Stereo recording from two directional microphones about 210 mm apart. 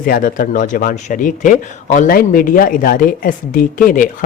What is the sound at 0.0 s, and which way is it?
Speech, 40° left (ahead or behind).